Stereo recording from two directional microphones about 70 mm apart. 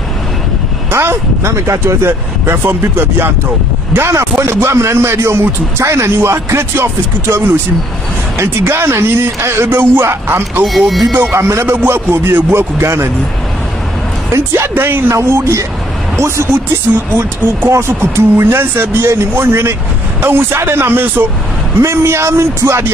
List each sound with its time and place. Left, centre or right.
0.9 s speech: right
10.6 s speech: centre
11.3 s speech: right
14.7 s speech: right